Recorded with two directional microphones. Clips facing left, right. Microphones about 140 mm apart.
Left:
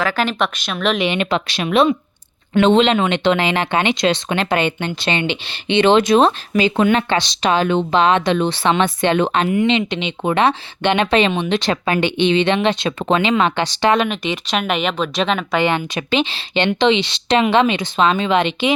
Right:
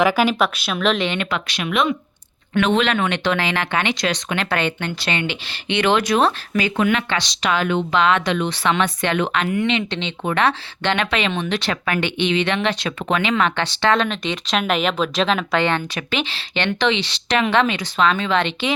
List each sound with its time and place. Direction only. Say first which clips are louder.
0.0 s speech: right 2 dB; 10° right (ahead or behind)
1.0 s speech: left 4 dB; 20° left (ahead or behind)
16.0 s speech: left 5 dB; 20° left (ahead or behind)